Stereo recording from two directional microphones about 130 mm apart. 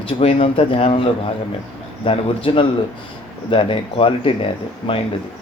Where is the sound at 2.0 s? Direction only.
45° left (ahead or behind).